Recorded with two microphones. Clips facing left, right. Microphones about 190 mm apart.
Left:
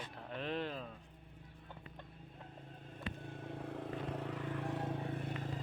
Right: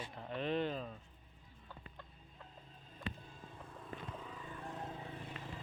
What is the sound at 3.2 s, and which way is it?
Vehicle, 70° left (ahead or behind).